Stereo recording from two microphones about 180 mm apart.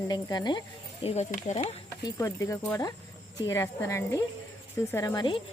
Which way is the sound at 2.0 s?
15° left (ahead or behind).